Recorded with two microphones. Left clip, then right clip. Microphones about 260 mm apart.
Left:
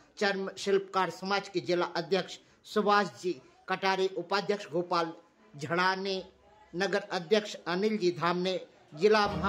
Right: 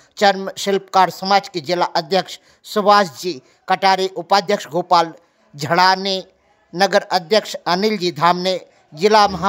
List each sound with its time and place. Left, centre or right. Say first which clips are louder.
0.1 s speech: right 15 dB; right